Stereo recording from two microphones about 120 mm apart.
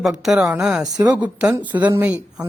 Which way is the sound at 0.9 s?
30° right (ahead or behind).